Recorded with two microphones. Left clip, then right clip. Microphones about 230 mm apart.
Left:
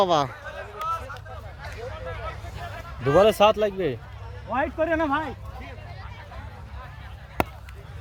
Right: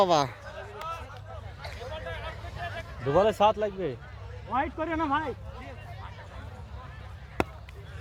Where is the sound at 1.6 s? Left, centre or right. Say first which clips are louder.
Left 2 dB; right.